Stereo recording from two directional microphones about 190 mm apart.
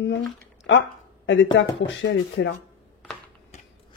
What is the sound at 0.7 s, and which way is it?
A woman's voice, 80° left.